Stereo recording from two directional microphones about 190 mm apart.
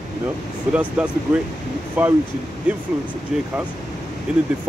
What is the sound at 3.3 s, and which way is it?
Speech, 5° right (ahead or behind).